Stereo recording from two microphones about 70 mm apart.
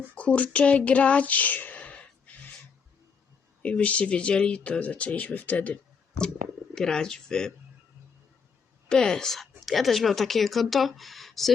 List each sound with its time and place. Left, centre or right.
0.2 s speech: left
3.6 s speech: centre
8.9 s a woman's voice: centre